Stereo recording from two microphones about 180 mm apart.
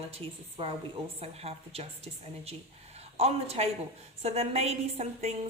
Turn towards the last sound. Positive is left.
turn(degrees=-35)  # may be behind; listen again after turning